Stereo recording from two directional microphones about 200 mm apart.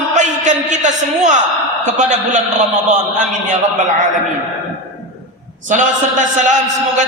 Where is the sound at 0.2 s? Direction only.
35° right (ahead or behind).